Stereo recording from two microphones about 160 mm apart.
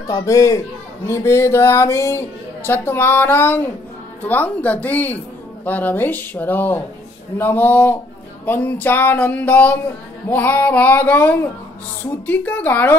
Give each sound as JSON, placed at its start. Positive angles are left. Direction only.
{"t": 0.1, "sound": "speech", "side_deg": 20}